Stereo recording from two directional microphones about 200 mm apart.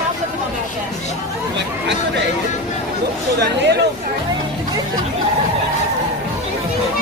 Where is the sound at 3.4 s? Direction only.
55° right (ahead or behind).